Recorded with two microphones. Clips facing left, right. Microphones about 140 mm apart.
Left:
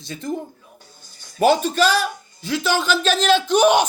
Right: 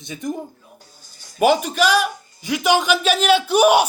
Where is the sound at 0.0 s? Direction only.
15° right (ahead or behind).